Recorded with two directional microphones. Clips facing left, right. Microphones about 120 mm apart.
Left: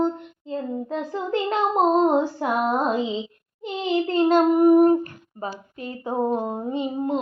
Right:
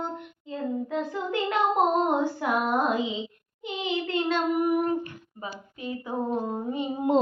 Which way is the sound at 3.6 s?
40° left (ahead or behind).